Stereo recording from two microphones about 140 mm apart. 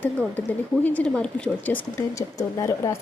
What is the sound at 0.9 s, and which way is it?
A woman's voice, 10° left (ahead or behind).